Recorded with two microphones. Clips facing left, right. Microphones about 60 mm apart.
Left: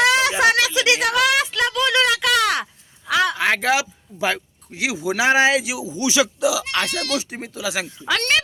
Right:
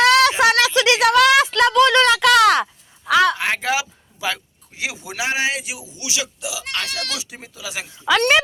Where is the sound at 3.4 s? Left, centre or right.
Left.